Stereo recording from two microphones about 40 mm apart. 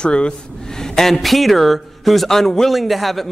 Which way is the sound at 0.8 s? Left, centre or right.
Centre.